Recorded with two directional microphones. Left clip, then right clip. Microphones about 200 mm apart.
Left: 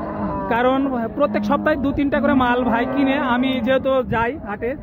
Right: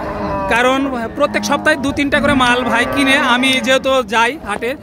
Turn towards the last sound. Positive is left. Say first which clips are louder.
# right 6 dB
turn(degrees=-10)  # may be behind; listen again after turning